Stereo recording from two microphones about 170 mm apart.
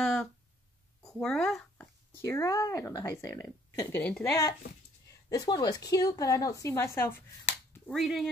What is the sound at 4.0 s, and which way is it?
Speech, 5° left (ahead or behind).